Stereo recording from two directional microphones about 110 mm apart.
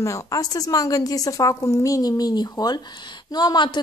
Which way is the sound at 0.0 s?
30° left (ahead or behind).